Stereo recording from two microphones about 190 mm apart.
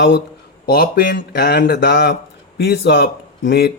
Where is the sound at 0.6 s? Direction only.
55° left (ahead or behind).